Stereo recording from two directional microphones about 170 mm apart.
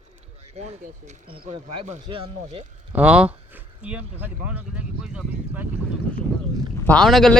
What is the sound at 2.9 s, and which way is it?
Speech, 10° right (ahead or behind).